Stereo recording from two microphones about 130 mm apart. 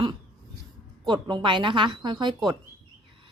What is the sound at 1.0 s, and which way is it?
A woman's voice, 35° right (ahead or behind).